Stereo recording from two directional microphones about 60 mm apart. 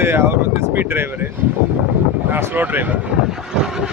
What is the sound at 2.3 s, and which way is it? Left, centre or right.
Speech, right.